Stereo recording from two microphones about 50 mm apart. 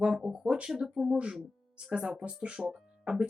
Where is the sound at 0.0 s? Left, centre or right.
Centre.